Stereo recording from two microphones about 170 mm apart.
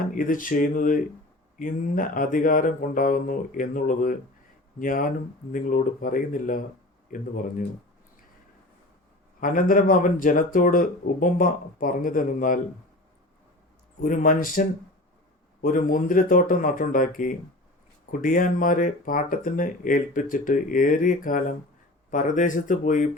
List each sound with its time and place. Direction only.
0.1 s speech: 55° left (ahead or behind)
9.4 s speech: 50° left (ahead or behind)
14.0 s speech: 55° left (ahead or behind)